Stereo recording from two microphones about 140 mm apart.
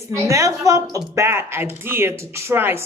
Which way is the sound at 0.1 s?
20° right (ahead or behind).